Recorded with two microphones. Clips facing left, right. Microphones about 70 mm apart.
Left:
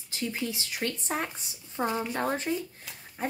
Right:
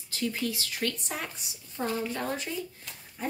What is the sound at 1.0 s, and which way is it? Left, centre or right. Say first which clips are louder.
Speech: left 4 dB; left.